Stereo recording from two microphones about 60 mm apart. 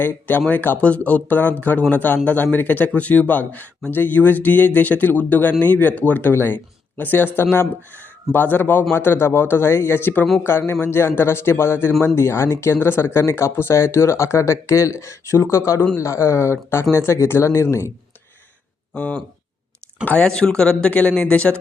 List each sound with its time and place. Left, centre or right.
0.0 s speech: left
20.1 s speech: centre